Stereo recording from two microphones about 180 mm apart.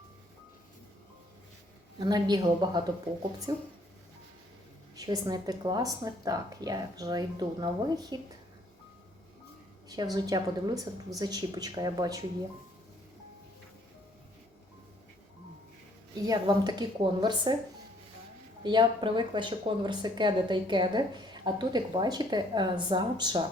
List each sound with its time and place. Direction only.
2.0 s speech: 20° right (ahead or behind)
4.9 s speech: 20° right (ahead or behind)
9.9 s speech: 20° right (ahead or behind)
16.2 s speech: 20° right (ahead or behind)
18.6 s speech: 25° right (ahead or behind)